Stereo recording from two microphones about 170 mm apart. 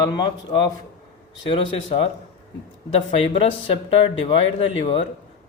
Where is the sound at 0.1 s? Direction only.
25° left (ahead or behind).